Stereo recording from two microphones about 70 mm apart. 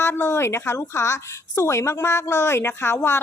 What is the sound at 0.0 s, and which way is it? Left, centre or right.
Speech, left.